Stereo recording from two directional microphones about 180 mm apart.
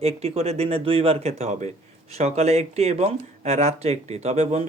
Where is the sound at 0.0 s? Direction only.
35° right (ahead or behind).